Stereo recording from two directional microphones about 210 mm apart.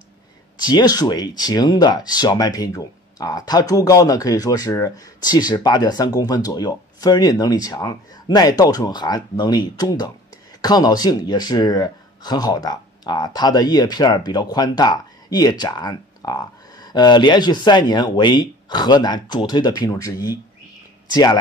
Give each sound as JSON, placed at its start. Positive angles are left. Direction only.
{"t": 0.6, "sound": "speech", "side_deg": 20}